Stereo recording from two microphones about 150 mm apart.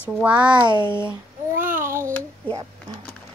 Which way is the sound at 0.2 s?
10° right (ahead or behind).